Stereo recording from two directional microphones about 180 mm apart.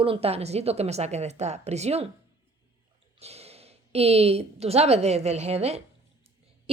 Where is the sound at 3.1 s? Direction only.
35° right (ahead or behind).